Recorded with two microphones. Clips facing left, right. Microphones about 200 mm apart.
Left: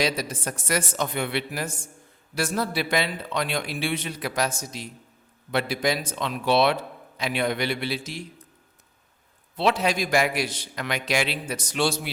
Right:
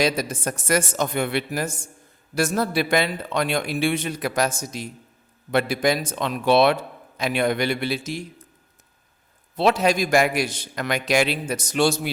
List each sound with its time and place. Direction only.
0.0 s a man's voice: 45° right (ahead or behind)
9.6 s a man's voice: 45° right (ahead or behind)